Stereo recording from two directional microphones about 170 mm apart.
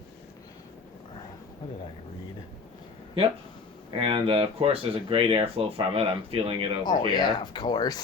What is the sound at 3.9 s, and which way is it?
Speech, 30° right (ahead or behind).